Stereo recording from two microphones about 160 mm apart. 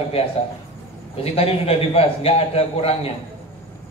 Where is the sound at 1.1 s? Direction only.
35° left (ahead or behind).